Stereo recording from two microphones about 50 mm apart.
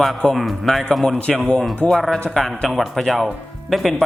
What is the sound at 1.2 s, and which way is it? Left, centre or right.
Speech, left.